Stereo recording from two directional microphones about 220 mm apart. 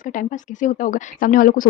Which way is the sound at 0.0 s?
35° left (ahead or behind).